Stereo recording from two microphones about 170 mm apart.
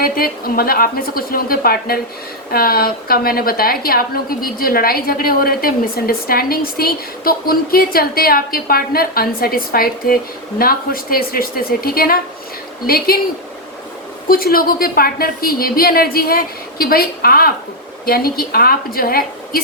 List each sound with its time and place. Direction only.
0.0 s a woman's voice: 60° left (ahead or behind)
14.3 s a woman's voice: 60° left (ahead or behind)